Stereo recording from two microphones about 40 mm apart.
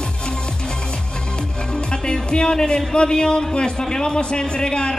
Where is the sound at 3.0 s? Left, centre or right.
Left.